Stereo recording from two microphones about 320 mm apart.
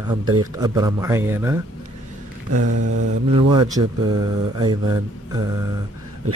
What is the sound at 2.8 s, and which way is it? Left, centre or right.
Mantra, right.